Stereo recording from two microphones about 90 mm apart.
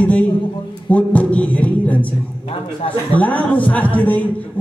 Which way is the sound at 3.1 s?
15° left (ahead or behind).